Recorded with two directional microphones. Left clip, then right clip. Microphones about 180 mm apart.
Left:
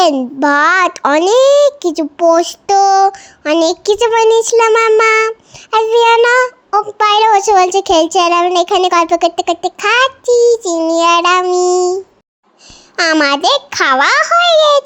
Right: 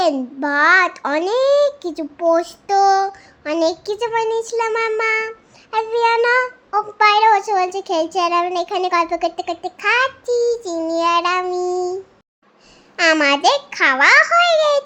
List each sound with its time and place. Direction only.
0.0 s child singing: 45° left (ahead or behind)
13.0 s a child's voice: 40° left (ahead or behind)